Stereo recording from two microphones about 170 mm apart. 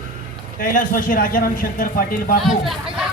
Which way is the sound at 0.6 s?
55° left (ahead or behind).